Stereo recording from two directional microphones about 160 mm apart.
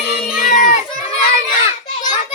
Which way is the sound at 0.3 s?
60° left (ahead or behind).